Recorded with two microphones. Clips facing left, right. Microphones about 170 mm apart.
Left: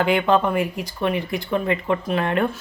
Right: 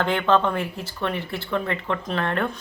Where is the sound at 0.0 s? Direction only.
10° left (ahead or behind).